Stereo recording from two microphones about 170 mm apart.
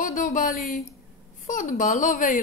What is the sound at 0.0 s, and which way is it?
Speech, 50° left (ahead or behind).